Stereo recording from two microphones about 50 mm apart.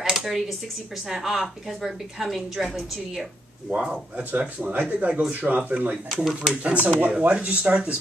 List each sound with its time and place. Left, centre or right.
0.0 s a sound: centre
1.0 s a woman's voice: centre
3.7 s speech: centre
4.2 s speech: right
6.1 s speech: centre
6.5 s speech: right